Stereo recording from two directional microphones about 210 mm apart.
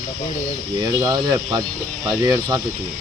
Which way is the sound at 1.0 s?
15° right (ahead or behind).